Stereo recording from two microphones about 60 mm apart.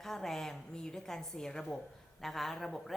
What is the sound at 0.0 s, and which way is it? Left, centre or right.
A woman's voice, centre.